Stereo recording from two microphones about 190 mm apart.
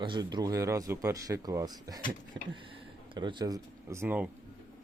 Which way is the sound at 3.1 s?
25° right (ahead or behind).